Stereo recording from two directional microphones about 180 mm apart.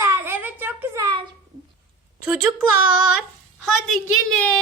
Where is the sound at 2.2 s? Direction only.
5° right (ahead or behind).